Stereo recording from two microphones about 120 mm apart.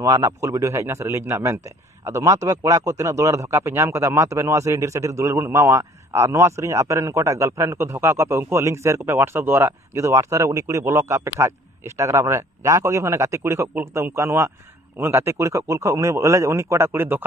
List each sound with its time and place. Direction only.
0.0 s a man's voice: 25° right (ahead or behind)